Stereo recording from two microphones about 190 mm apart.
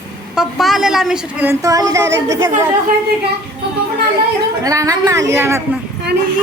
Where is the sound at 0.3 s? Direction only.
Centre (ahead or behind).